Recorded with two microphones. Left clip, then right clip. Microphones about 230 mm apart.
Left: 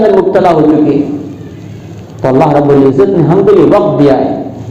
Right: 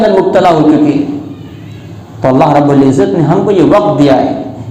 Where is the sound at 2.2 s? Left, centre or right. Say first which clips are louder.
Even; right.